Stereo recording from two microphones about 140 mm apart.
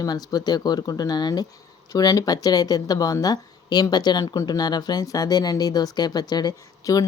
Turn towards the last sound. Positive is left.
turn(degrees=25)  # may be behind; listen again after turning